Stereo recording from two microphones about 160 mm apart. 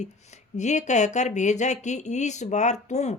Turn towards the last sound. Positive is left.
turn(degrees=45)  # may be behind; listen again after turning